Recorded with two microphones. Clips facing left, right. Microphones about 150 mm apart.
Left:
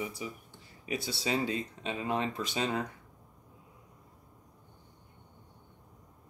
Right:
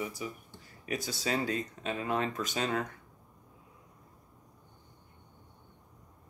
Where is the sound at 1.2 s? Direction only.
45° right (ahead or behind).